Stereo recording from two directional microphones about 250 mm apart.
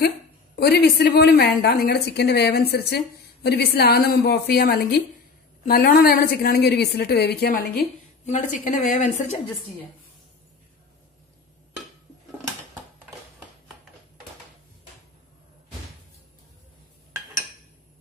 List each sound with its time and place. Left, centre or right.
0.6 s a woman's voice: left